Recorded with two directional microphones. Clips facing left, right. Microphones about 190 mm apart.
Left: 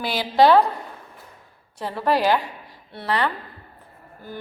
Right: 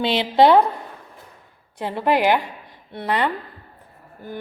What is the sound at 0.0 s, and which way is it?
Speech, 25° right (ahead or behind).